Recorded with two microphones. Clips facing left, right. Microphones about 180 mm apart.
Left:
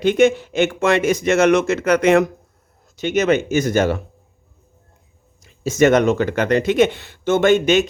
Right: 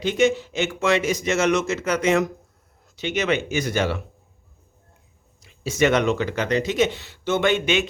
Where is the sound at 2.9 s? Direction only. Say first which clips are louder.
Left 6 dB; 45° left (ahead or behind).